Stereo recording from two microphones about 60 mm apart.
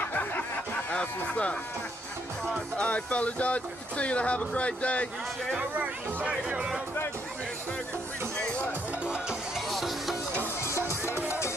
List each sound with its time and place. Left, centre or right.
0.0 s a sound: left
0.9 s speech: centre
2.8 s speech: left
5.6 s speech: right
8.4 s music: centre
9.7 s music: centre
10.9 s music: left